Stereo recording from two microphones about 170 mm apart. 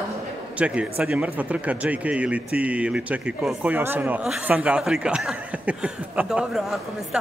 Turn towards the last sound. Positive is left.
turn(degrees=-5)  # may be behind; listen again after turning